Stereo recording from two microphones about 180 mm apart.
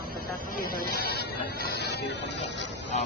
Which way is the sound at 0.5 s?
55° left (ahead or behind).